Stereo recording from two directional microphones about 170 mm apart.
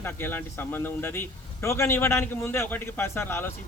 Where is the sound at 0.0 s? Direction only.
15° left (ahead or behind).